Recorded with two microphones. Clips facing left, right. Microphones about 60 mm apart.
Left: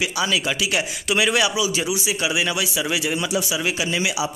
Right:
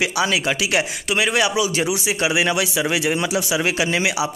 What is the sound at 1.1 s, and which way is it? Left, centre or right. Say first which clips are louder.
Speech: even; right.